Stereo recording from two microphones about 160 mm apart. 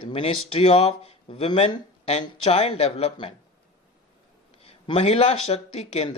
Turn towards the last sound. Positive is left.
turn(degrees=40)  # may be behind; listen again after turning